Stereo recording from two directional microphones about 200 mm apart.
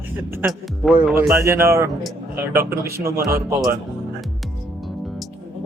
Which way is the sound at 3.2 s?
15° right (ahead or behind).